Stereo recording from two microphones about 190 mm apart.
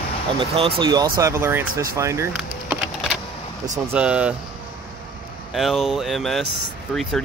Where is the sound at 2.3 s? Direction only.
5° right (ahead or behind).